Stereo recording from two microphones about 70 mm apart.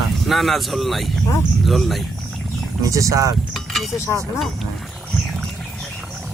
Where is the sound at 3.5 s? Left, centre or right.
Centre.